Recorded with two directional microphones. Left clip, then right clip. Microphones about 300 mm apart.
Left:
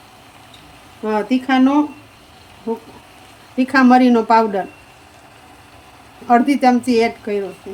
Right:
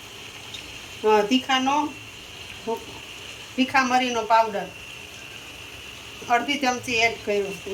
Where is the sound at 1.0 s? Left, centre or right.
Left.